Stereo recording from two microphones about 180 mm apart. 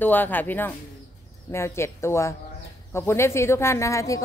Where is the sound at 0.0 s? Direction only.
10° left (ahead or behind).